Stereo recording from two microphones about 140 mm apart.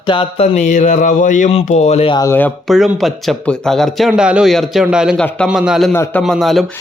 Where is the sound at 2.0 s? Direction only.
30° left (ahead or behind).